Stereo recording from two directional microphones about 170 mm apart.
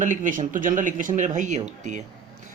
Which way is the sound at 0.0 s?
50° right (ahead or behind).